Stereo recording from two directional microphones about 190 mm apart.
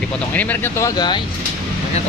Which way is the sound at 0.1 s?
10° left (ahead or behind).